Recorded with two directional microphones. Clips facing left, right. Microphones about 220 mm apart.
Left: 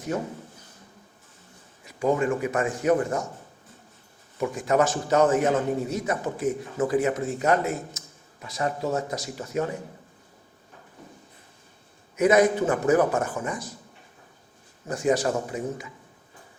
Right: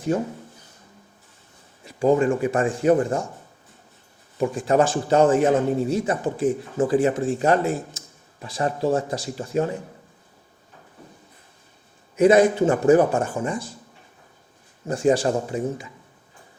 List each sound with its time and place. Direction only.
0.1 s a man's voice: 30° right (ahead or behind)
1.8 s speech: 30° right (ahead or behind)
4.4 s a man's voice: 30° right (ahead or behind)
12.1 s a man's voice: 30° right (ahead or behind)
14.8 s a man's voice: 30° right (ahead or behind)